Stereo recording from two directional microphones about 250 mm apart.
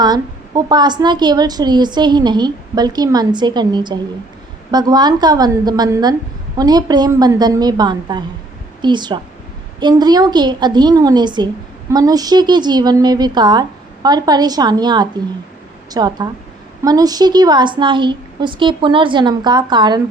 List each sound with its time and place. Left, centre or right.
0.0 s a woman's voice: centre